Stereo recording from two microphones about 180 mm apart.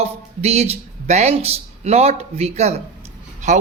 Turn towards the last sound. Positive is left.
turn(degrees=-40)  # may be behind; listen again after turning